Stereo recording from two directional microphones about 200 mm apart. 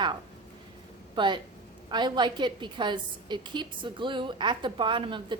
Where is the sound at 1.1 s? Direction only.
20° right (ahead or behind).